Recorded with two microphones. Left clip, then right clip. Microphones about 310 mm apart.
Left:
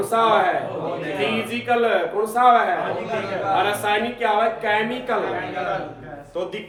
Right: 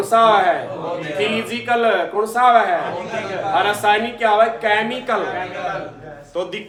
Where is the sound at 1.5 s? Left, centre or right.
Right.